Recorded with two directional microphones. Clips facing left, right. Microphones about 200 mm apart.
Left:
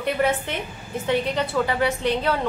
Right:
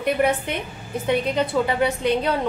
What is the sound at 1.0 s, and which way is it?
A woman's voice, 20° right (ahead or behind).